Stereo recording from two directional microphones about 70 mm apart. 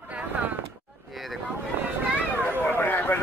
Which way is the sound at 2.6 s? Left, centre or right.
Left.